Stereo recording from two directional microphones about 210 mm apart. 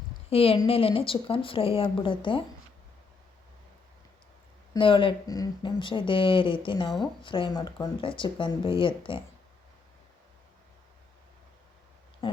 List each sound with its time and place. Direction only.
0.3 s speech: 25° left (ahead or behind)
4.7 s speech: 25° left (ahead or behind)